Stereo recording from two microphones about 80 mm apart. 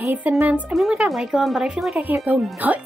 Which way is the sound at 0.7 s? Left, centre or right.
Centre.